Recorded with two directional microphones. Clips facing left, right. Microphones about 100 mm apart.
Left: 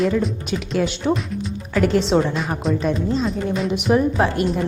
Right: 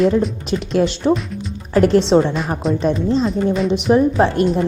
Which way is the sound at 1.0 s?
20° right (ahead or behind).